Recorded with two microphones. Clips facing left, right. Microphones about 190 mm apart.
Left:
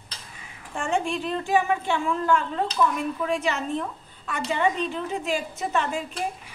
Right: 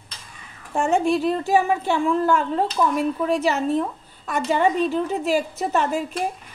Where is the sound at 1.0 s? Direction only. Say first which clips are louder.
Right 7 dB; 40° right (ahead or behind).